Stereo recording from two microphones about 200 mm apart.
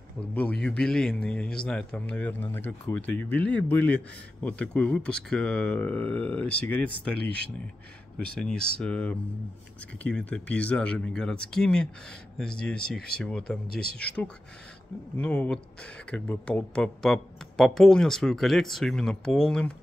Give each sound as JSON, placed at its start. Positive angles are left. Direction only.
{"t": 0.3, "sound": "speech", "side_deg": 5}
{"t": 8.2, "sound": "speech", "side_deg": 5}